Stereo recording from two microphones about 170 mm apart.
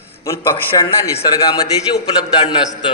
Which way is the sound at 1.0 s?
20° left (ahead or behind).